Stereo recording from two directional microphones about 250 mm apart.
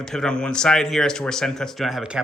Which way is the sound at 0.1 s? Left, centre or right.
Centre.